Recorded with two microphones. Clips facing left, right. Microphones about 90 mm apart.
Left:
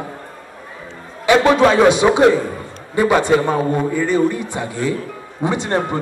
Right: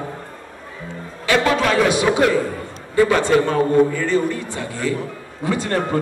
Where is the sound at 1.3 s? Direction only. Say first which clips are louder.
Left 5 dB; 20° left (ahead or behind).